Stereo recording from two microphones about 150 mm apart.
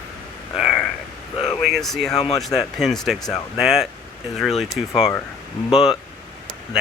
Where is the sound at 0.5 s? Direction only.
Centre (ahead or behind).